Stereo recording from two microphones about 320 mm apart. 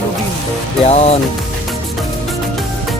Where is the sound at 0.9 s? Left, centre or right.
Centre.